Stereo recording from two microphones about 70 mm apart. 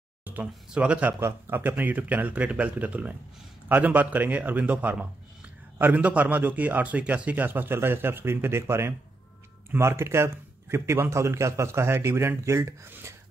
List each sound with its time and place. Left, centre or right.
0.2 s speech: right
1.2 s a man's voice: right